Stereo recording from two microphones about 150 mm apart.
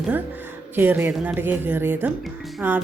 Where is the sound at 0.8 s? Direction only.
15° right (ahead or behind).